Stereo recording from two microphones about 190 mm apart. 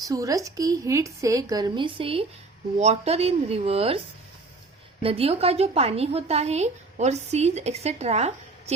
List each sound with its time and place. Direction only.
0.0 s a woman's voice: 20° right (ahead or behind)
5.0 s a woman's voice: 30° right (ahead or behind)